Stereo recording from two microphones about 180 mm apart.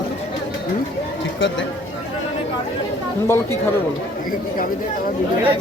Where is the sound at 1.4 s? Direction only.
90° left.